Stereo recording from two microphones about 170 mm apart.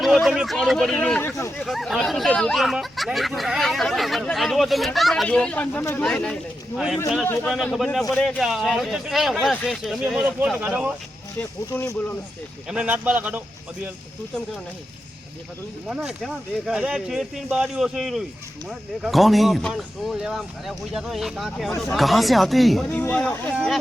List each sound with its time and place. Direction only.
0.0 s speech: centre (ahead or behind); by 1.6 s 15° left (ahead or behind)
1.6 s speech: centre (ahead or behind)
11.3 s speech: 15° left (ahead or behind)
12.6 s speech: 5° right (ahead or behind)
15.9 s speech: centre (ahead or behind)